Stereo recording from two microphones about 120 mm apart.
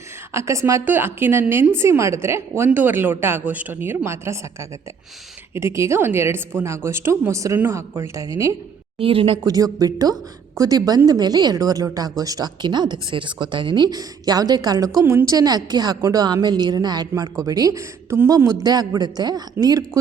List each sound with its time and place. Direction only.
0.3 s a woman's voice: 25° right (ahead or behind)
5.5 s a woman's voice: 25° right (ahead or behind)
9.0 s speech: 50° right (ahead or behind)
9.4 s a woman's voice: 30° right (ahead or behind)